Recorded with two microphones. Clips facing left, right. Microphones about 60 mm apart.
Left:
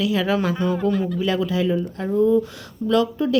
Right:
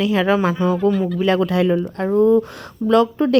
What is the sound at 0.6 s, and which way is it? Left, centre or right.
Speech, right.